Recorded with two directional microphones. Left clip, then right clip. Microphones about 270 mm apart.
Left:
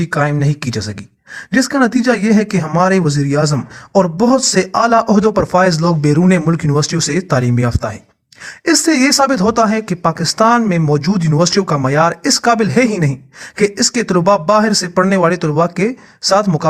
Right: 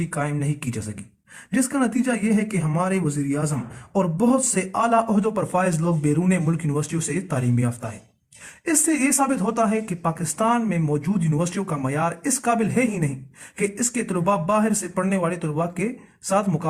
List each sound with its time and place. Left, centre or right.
0.1 s speech: left